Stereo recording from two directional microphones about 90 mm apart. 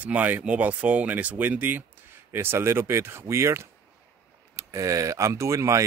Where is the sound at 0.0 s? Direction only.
20° right (ahead or behind).